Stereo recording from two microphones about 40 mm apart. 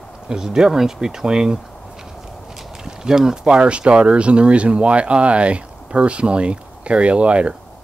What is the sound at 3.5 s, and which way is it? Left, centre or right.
Speech, right.